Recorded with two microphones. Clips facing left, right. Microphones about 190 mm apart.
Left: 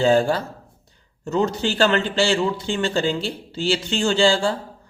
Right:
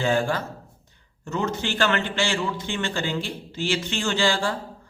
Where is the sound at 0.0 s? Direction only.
35° left (ahead or behind).